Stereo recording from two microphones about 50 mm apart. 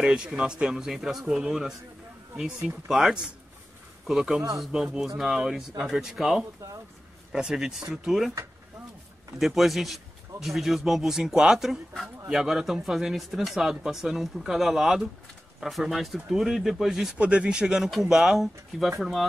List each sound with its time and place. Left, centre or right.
0.0 s speech: centre
0.7 s speech: centre
2.9 s a man's voice: centre
9.4 s speech: centre
17.2 s speech: right; by 19.2 s centre